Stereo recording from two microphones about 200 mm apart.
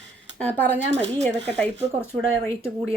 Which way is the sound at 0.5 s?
10° left (ahead or behind).